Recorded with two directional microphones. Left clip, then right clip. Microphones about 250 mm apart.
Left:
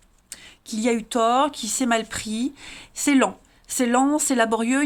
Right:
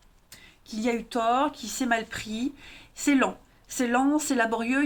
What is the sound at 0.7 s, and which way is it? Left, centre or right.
Speech, left.